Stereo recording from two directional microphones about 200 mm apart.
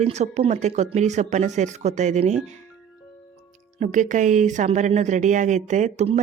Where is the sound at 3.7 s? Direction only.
40° right (ahead or behind).